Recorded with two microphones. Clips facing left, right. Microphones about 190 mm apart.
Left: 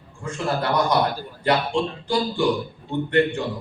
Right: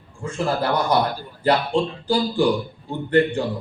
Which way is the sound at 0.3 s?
30° right (ahead or behind).